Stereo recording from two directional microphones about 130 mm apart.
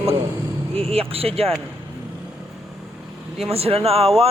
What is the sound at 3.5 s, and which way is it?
Speech, 50° right (ahead or behind).